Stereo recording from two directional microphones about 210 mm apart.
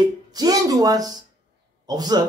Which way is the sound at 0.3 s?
20° right (ahead or behind).